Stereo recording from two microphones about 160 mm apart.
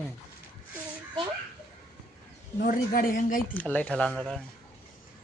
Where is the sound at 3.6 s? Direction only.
10° left (ahead or behind).